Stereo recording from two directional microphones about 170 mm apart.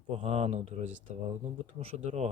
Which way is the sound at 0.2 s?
40° right (ahead or behind).